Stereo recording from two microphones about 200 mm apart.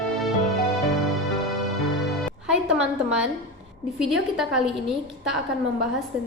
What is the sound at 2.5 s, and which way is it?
A woman's voice, 5° right (ahead or behind).